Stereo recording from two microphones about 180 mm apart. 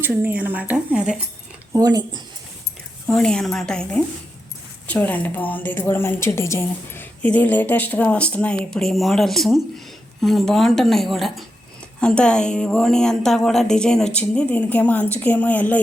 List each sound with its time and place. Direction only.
0.0 s a woman's voice: 10° right (ahead or behind)
1.7 s speech: 20° right (ahead or behind)
3.1 s a woman's voice: 5° left (ahead or behind)